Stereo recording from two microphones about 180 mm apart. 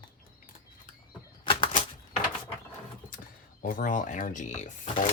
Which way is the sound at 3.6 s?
50° left (ahead or behind).